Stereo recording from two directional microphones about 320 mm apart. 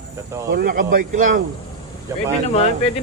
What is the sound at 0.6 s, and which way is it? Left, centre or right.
Speech, right.